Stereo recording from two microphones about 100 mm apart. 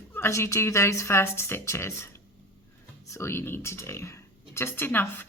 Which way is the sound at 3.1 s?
25° left (ahead or behind).